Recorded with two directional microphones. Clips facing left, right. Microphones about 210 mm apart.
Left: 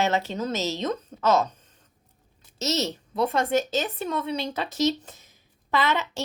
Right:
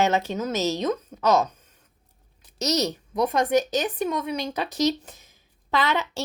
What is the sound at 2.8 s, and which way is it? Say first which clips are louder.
A woman's voice: right 1 dB; 15° right (ahead or behind).